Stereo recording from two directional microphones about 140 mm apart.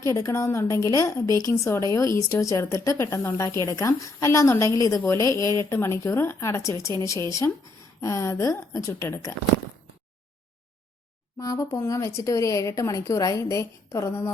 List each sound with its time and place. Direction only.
0.1 s speech: 20° left (ahead or behind)
11.3 s speech: 25° left (ahead or behind)